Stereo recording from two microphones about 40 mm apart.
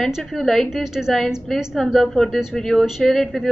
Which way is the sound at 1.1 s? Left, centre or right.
Centre.